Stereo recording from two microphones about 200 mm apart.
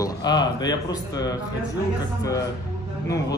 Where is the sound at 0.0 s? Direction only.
20° left (ahead or behind).